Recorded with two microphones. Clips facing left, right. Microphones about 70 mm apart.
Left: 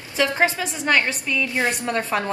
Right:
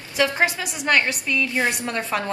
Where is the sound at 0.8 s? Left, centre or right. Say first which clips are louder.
Even; centre.